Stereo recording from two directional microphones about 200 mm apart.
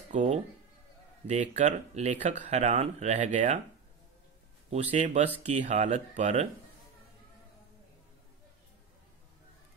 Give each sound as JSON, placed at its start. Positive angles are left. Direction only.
{"t": 0.1, "sound": "speech", "side_deg": -35}
{"t": 4.6, "sound": "speech", "side_deg": -35}